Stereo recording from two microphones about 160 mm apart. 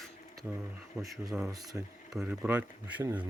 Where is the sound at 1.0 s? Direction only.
Centre (ahead or behind).